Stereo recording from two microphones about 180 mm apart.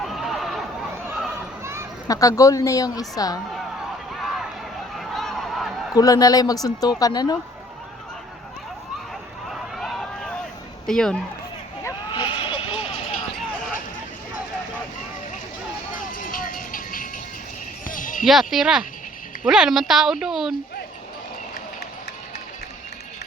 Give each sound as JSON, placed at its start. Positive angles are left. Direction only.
{"t": 0.0, "sound": "a sound", "side_deg": 0}
{"t": 1.6, "sound": "a sound", "side_deg": -15}
{"t": 2.0, "sound": "speech", "side_deg": 20}
{"t": 4.1, "sound": "run", "side_deg": 0}
{"t": 4.9, "sound": "a sound", "side_deg": 0}
{"t": 5.9, "sound": "speech", "side_deg": 20}
{"t": 9.5, "sound": "vehicle", "side_deg": 0}
{"t": 10.8, "sound": "speech", "side_deg": 5}
{"t": 12.1, "sound": "vehicle", "side_deg": 25}
{"t": 16.0, "sound": "vehicle", "side_deg": 50}
{"t": 17.8, "sound": "basketball bounce", "side_deg": 50}
{"t": 18.3, "sound": "speech", "side_deg": 0}